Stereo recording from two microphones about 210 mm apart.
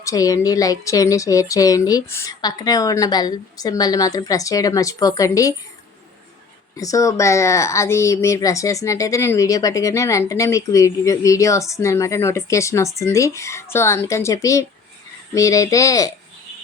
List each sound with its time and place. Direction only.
0.0 s speech: 15° left (ahead or behind)
6.7 s speech: 15° left (ahead or behind)